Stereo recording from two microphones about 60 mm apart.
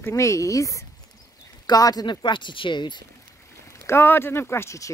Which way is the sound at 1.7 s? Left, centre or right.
Left.